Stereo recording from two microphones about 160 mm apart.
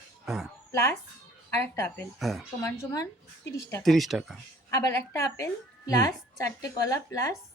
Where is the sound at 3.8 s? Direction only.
Centre (ahead or behind).